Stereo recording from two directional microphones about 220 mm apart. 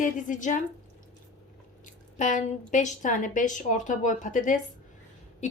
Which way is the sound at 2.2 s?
35° left (ahead or behind).